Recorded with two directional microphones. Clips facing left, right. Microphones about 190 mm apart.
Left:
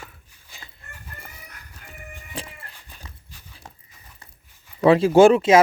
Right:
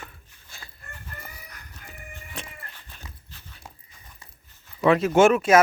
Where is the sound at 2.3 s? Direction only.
30° left (ahead or behind).